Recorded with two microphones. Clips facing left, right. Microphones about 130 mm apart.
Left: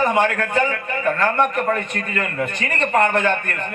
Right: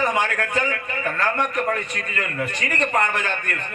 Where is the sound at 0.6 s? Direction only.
50° left (ahead or behind).